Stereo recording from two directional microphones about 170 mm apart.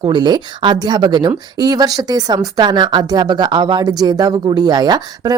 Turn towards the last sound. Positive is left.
turn(degrees=-25)  # may be behind; listen again after turning